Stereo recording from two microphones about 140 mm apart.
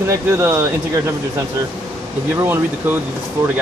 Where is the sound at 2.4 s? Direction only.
15° right (ahead or behind).